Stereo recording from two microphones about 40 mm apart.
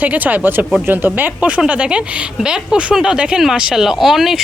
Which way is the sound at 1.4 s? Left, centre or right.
Right.